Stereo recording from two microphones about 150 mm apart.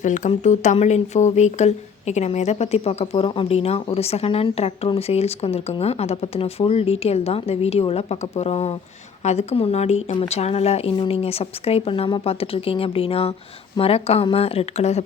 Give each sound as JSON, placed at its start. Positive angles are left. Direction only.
{"t": 0.0, "sound": "speech", "side_deg": 55}